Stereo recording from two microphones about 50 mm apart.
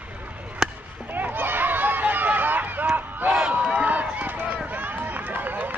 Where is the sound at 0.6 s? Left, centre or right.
Centre.